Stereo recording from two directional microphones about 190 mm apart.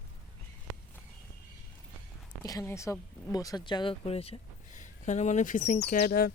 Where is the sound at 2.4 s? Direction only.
20° left (ahead or behind); by 5.8 s 40° left (ahead or behind).